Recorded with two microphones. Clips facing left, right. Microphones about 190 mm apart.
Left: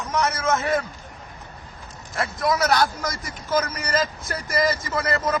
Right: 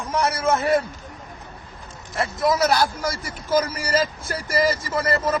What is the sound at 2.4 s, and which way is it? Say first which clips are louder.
Speech: right 1 dB; 25° right (ahead or behind).